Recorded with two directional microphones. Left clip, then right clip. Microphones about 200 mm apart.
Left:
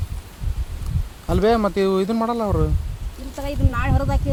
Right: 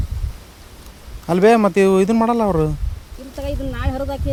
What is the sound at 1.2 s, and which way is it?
Speech, 30° right (ahead or behind).